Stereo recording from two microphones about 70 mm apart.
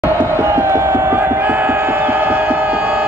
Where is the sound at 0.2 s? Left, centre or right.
Right.